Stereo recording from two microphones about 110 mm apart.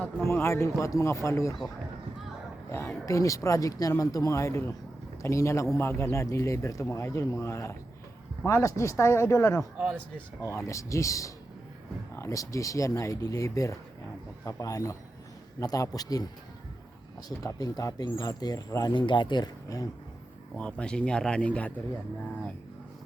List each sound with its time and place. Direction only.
0.3 s speech: 25° left (ahead or behind)
2.6 s speech: 25° left (ahead or behind)
17.2 s speech: 35° left (ahead or behind)
20.6 s speech: 10° left (ahead or behind)